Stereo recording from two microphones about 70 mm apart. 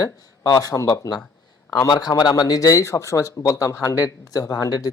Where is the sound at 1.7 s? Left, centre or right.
Left.